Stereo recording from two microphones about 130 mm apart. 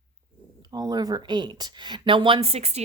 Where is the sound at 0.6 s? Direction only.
30° right (ahead or behind).